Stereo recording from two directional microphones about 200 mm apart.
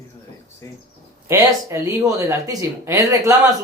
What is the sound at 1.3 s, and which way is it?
Speech, 15° right (ahead or behind).